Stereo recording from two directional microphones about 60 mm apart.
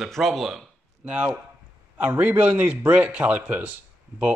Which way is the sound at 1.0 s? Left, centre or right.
Right.